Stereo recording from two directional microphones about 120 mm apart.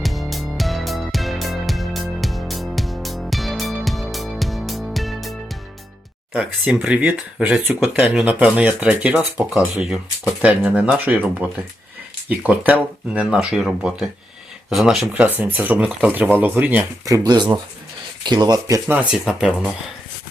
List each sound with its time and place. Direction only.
0.0 s music: centre (ahead or behind)
6.3 s speech: 10° right (ahead or behind)
15.1 s speech: 10° right (ahead or behind)
17.1 s speech: 35° right (ahead or behind)
18.9 s speech: 10° right (ahead or behind)